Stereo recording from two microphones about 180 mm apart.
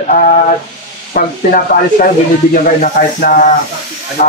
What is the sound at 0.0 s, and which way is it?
Speech, 45° left (ahead or behind).